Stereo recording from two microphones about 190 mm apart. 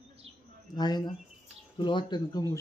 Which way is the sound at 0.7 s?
20° left (ahead or behind).